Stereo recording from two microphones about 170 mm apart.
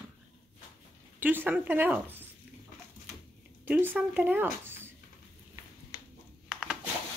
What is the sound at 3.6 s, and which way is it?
Speech, 10° right (ahead or behind).